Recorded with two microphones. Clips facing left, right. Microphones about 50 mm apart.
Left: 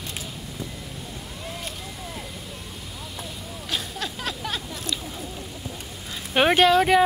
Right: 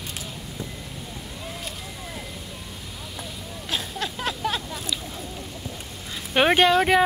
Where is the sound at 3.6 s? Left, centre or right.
Right.